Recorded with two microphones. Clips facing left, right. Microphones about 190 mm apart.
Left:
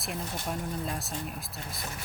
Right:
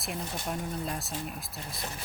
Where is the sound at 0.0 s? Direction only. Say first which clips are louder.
Even; centre (ahead or behind).